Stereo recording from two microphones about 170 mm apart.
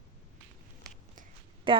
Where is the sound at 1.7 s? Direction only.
30° right (ahead or behind).